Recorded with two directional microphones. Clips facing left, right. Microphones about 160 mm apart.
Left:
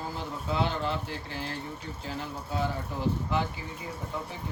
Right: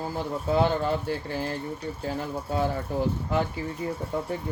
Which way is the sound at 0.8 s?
45° right (ahead or behind).